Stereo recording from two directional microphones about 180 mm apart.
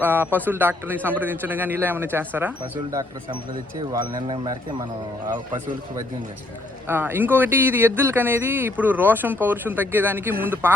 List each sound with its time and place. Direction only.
0.0 s speech: 10° right (ahead or behind)
3.9 s speech: 25° right (ahead or behind)
6.8 s speech: 10° right (ahead or behind)